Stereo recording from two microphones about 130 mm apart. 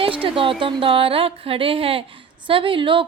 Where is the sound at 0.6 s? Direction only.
45° right (ahead or behind).